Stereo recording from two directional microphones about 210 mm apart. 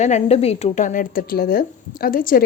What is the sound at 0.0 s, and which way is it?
A woman's voice, 30° left (ahead or behind).